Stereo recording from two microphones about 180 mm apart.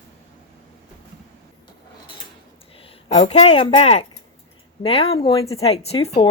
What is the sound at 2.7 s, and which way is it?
Speech, 30° left (ahead or behind).